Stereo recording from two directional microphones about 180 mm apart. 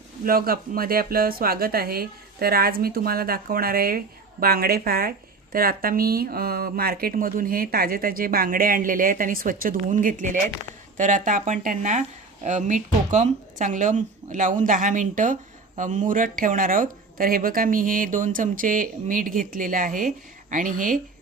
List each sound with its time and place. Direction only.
0.3 s speech: 55° right (ahead or behind)